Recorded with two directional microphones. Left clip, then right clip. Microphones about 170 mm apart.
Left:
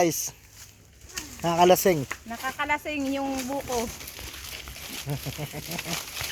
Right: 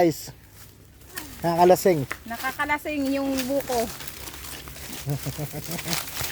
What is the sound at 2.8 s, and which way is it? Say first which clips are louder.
Speech: right 2 dB; 35° right (ahead or behind).